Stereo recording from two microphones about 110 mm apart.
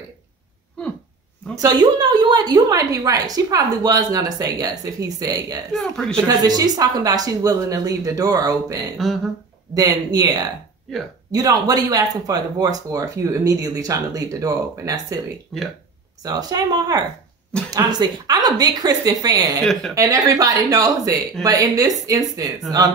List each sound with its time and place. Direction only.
1.6 s a woman's voice: 40° right (ahead or behind)
5.7 s speech: 5° left (ahead or behind)
6.2 s a woman's voice: 35° right (ahead or behind)
8.9 s speech: centre (ahead or behind)
9.8 s a woman's voice: 35° right (ahead or behind)
15.5 s speech: centre (ahead or behind)
16.2 s a woman's voice: 35° right (ahead or behind)
19.6 s speech: 5° left (ahead or behind)
20.0 s a woman's voice: 30° right (ahead or behind)